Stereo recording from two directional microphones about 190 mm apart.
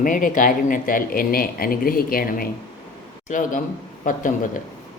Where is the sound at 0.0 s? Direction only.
45° left (ahead or behind).